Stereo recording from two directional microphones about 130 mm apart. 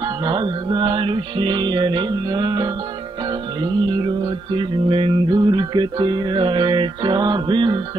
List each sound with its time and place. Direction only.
0.2 s music: 35° right (ahead or behind)